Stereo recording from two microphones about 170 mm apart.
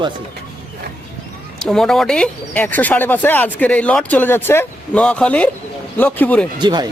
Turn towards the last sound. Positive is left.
turn(degrees=-25)  # may be behind; listen again after turning